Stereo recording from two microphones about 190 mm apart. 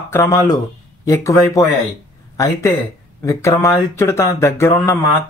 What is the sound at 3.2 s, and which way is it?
Speech, 15° left (ahead or behind).